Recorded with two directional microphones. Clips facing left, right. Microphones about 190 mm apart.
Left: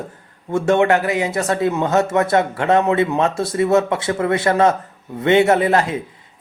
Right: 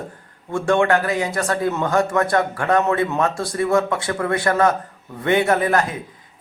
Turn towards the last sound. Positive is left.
turn(degrees=25)  # may be behind; listen again after turning